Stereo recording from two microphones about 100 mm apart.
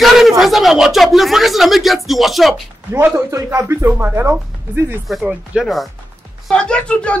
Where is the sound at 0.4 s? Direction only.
Centre (ahead or behind).